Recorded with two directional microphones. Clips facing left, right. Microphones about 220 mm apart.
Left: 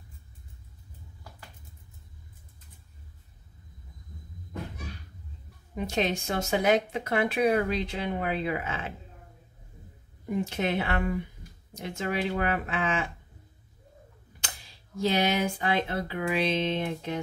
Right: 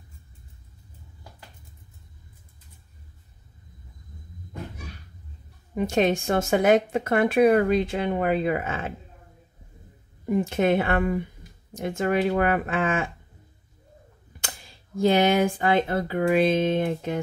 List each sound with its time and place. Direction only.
5.8 s speech: 50° right (ahead or behind)
10.2 s speech: 50° right (ahead or behind)
15.0 s speech: 50° right (ahead or behind)